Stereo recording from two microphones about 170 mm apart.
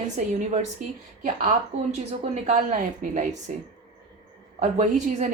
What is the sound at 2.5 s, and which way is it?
A woman's voice, 50° right (ahead or behind).